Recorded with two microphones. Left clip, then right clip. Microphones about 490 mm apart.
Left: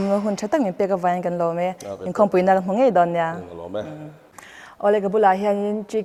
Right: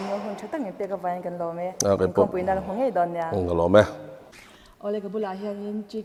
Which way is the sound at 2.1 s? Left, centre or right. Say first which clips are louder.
Left 6 dB; left.